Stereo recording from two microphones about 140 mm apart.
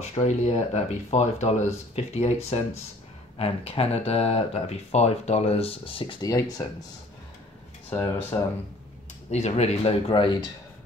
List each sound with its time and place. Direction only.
0.0 s speech: 50° left (ahead or behind)
6.2 s speech: 25° left (ahead or behind)
7.9 s speech: 15° left (ahead or behind)
9.3 s speech: 50° left (ahead or behind)